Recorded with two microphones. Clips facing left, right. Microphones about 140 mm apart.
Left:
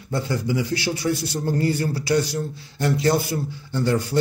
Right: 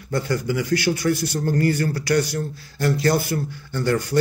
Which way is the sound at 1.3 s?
20° left (ahead or behind).